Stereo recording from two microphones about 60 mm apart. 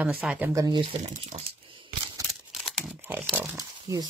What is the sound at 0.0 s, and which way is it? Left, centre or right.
Speech, right.